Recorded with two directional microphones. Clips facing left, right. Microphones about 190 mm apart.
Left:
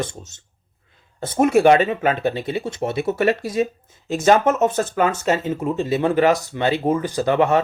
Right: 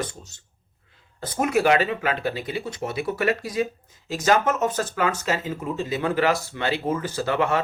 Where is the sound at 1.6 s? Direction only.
25° left (ahead or behind).